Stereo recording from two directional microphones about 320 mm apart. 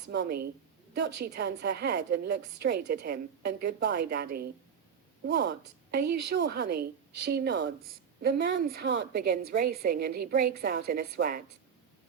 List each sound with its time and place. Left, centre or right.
0.1 s a woman's voice: right
6.1 s speech: right
6.3 s a woman's voice: right